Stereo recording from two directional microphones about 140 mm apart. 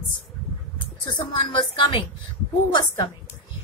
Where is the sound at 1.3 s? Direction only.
35° left (ahead or behind).